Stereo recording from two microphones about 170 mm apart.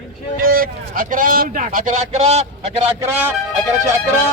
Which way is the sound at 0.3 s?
55° right (ahead or behind).